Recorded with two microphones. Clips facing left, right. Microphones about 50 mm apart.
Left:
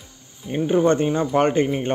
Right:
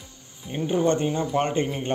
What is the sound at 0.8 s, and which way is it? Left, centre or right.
Speech, left.